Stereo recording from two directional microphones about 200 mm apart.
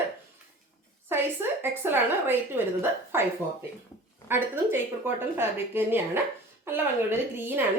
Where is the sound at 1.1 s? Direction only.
10° right (ahead or behind).